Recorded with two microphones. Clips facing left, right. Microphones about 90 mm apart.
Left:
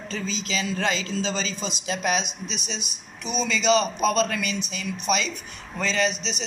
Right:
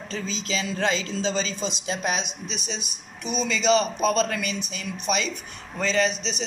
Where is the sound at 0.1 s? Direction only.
30° right (ahead or behind).